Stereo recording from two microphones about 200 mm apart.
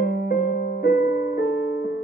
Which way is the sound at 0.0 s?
45° left (ahead or behind).